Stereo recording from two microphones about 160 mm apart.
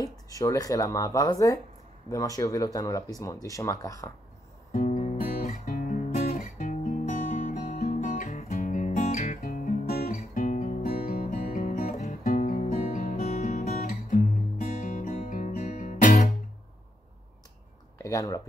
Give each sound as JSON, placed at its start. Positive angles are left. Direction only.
{"t": 0.0, "sound": "speech", "side_deg": 20}
{"t": 4.7, "sound": "music", "side_deg": 45}
{"t": 5.1, "sound": "guitar", "side_deg": 60}
{"t": 7.4, "sound": "music", "side_deg": 55}
{"t": 11.6, "sound": "music", "side_deg": 45}
{"t": 17.9, "sound": "a sound", "side_deg": 20}